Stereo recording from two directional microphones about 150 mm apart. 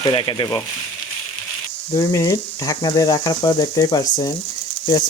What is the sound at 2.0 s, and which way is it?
Speech, 20° left (ahead or behind).